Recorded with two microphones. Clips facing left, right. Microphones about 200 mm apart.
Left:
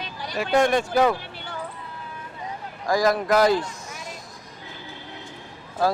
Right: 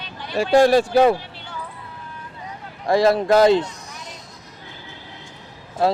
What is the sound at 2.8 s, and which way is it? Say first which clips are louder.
Speech: right 4 dB; 30° right (ahead or behind).